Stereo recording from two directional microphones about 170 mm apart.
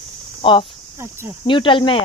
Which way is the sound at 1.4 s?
30° left (ahead or behind).